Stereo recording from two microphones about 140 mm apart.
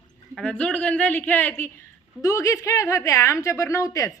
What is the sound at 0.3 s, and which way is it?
Speech, 5° left (ahead or behind).